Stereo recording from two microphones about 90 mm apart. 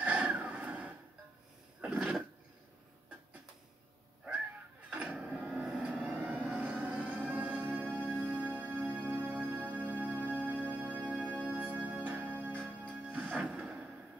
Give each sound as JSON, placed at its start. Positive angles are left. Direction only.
{"t": 0.0, "sound": "a sound", "side_deg": -15}
{"t": 4.9, "sound": "a sound", "side_deg": -10}
{"t": 5.9, "sound": "vehicle", "side_deg": -15}
{"t": 6.6, "sound": "music", "side_deg": -15}
{"t": 12.5, "sound": "music", "side_deg": 10}
{"t": 13.3, "sound": "music", "side_deg": -15}